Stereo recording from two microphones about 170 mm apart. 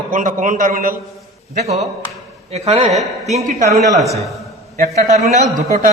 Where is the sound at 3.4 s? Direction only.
50° right (ahead or behind).